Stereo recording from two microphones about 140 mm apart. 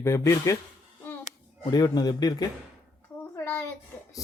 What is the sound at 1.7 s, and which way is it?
Speech, 30° left (ahead or behind).